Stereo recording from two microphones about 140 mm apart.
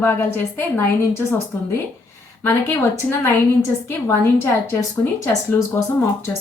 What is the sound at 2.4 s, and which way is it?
Speech, 20° left (ahead or behind).